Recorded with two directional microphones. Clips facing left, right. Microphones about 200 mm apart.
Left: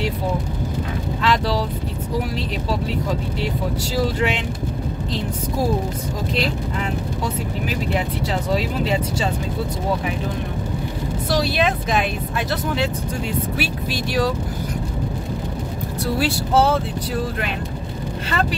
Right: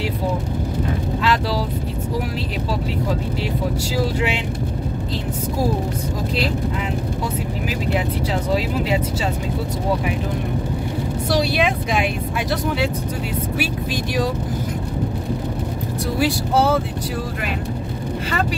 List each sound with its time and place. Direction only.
1.2 s speech: 5° right (ahead or behind)
3.9 s speech: 10° right (ahead or behind)
8.5 s speech: 5° right (ahead or behind)
11.2 s speech: 15° right (ahead or behind)
16.2 s speech: 10° right (ahead or behind)